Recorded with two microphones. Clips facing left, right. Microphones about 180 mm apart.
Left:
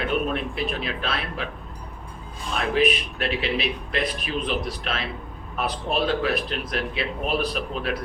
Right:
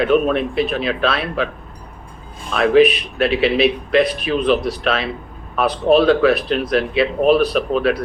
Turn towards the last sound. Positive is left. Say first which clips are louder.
# right 10 dB
turn(degrees=-80)